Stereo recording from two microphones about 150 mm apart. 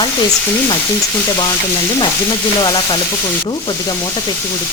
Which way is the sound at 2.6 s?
30° left (ahead or behind).